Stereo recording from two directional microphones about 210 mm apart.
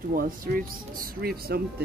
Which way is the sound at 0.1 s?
40° right (ahead or behind).